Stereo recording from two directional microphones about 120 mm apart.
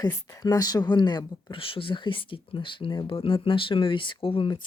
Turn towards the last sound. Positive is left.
turn(degrees=45)  # may be behind; listen again after turning